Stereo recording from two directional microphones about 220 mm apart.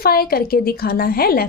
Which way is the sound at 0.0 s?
45° left (ahead or behind).